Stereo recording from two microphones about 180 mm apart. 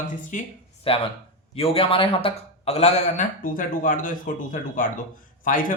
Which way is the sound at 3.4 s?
50° left (ahead or behind).